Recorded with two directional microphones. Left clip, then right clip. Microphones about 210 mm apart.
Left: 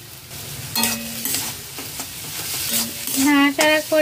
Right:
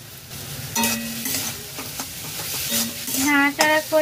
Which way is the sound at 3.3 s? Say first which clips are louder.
Left 1 dB; 55° left (ahead or behind).